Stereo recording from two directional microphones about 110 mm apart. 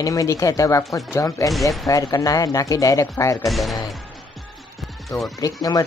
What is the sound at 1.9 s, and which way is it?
Speech, 30° left (ahead or behind).